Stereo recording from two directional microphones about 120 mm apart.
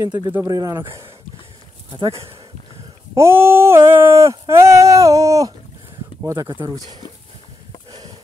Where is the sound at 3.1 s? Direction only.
20° right (ahead or behind).